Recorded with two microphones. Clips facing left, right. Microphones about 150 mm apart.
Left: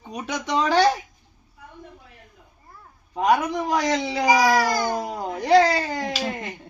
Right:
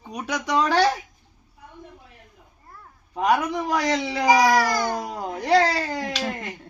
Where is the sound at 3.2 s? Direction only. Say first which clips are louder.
Left 1 dB; centre (ahead or behind).